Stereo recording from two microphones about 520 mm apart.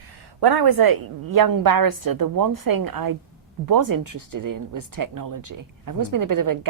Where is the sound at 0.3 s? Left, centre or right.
Right.